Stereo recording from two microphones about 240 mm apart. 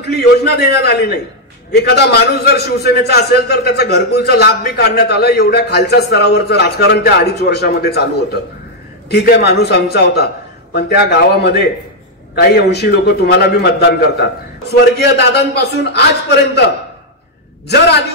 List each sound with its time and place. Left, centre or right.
0.0 s a man's voice: left
9.1 s a man's voice: left